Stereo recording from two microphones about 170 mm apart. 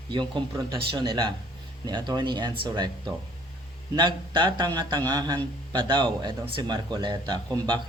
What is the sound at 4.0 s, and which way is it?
A man's voice, 30° right (ahead or behind).